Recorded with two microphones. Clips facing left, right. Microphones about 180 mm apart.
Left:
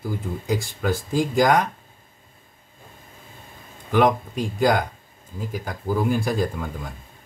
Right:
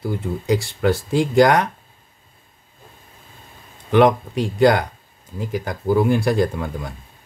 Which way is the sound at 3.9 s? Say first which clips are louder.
Right 4 dB; 75° right (ahead or behind).